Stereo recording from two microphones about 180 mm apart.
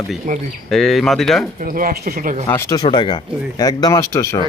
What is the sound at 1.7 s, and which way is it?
Speech, 50° right (ahead or behind).